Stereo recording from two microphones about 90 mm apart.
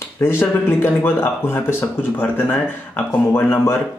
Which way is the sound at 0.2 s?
25° left (ahead or behind).